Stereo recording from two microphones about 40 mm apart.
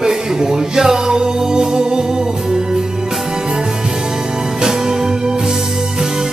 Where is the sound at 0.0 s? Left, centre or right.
Centre.